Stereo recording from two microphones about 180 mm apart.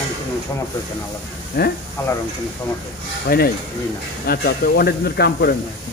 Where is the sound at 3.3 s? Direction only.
60° left (ahead or behind).